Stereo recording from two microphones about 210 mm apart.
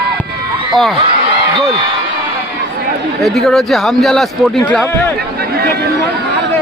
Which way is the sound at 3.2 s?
Centre (ahead or behind).